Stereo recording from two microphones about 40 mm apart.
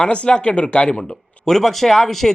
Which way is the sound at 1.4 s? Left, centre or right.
Centre.